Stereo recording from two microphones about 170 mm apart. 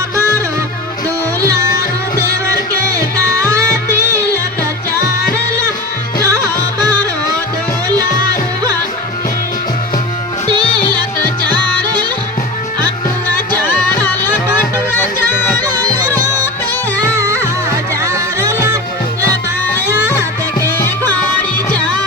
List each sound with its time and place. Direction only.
1.4 s music: 20° right (ahead or behind)
2.9 s music: 20° right (ahead or behind)
6.2 s music: 20° right (ahead or behind)
10.5 s music: 25° right (ahead or behind)
13.3 s music: 10° left (ahead or behind)
15.6 s music: 20° right (ahead or behind)
18.0 s music: 20° right (ahead or behind)
20.7 s music: 10° left (ahead or behind)